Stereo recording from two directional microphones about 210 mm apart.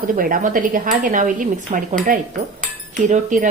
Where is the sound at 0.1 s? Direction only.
40° right (ahead or behind).